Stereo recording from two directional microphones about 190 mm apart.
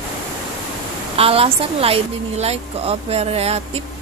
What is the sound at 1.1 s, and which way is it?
A woman's voice, 30° right (ahead or behind).